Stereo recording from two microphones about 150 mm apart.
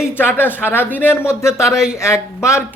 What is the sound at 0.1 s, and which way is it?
Speech, 15° left (ahead or behind).